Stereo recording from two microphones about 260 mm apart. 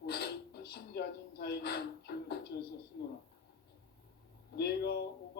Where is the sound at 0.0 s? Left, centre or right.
Left.